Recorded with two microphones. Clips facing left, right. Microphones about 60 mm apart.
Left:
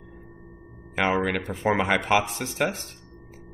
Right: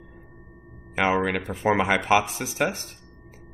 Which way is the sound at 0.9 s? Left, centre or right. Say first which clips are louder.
Right 1 dB; centre.